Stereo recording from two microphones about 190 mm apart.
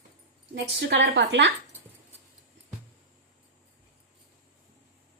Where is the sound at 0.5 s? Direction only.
65° right (ahead or behind).